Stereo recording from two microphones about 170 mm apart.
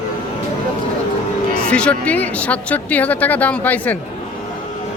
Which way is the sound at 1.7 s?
5° left (ahead or behind).